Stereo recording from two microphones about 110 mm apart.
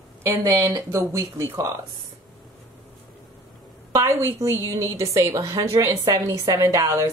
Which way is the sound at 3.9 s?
25° right (ahead or behind).